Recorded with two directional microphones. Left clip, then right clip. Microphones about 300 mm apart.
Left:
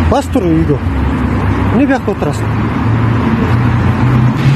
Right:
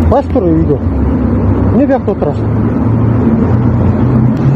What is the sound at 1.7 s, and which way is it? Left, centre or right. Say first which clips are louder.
Speech: right 2 dB; left.